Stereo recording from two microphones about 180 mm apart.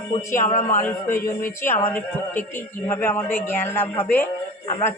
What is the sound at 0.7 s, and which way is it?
Speech, 10° left (ahead or behind).